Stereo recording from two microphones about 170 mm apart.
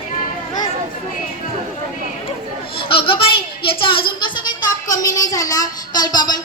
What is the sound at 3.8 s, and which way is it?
A woman's voice, 30° left (ahead or behind).